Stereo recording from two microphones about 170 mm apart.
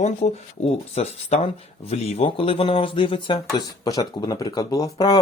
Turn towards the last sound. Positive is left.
turn(degrees=25)  # may be behind; listen again after turning